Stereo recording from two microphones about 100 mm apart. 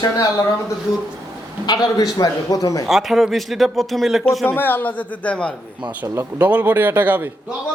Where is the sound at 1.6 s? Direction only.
45° left (ahead or behind).